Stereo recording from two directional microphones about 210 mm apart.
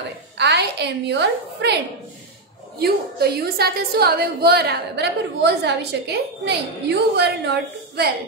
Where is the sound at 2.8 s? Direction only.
50° right (ahead or behind).